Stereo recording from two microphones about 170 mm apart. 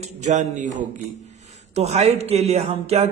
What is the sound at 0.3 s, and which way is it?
Speech, 45° right (ahead or behind).